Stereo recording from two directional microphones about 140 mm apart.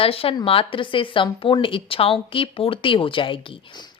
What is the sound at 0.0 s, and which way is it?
A woman's voice, 40° left (ahead or behind).